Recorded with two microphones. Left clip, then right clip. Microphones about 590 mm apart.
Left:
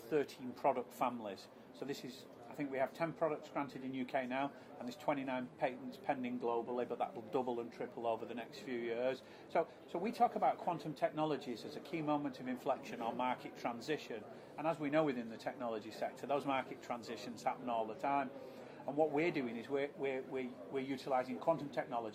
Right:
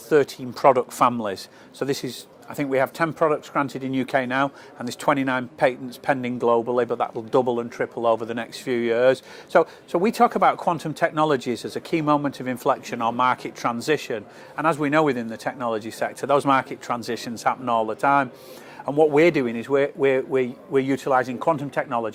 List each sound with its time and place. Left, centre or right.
0.1 s a man's voice: right